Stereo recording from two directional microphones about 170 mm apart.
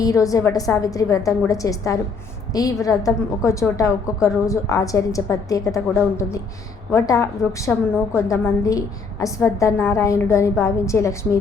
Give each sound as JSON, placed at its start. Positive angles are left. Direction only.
{"t": 0.0, "sound": "a woman's voice", "side_deg": 20}